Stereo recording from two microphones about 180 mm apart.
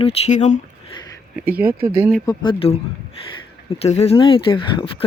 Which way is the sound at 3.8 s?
35° left (ahead or behind).